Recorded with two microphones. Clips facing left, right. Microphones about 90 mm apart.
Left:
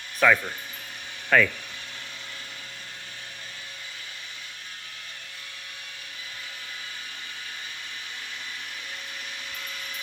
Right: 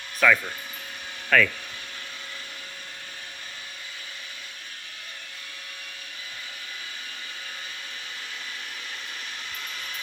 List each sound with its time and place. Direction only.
0.2 s speech: 20° left (ahead or behind)